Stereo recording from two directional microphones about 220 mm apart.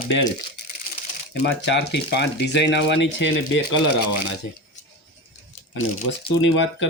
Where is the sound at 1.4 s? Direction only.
50° left (ahead or behind).